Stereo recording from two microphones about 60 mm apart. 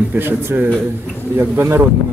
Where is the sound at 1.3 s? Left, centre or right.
Right.